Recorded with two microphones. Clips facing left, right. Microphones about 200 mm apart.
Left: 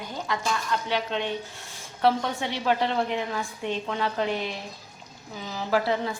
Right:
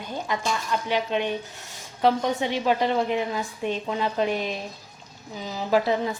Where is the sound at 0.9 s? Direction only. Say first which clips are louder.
Right 5 dB; 15° right (ahead or behind).